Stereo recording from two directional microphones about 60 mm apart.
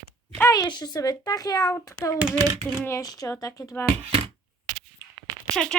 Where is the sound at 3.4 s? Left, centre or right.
Left.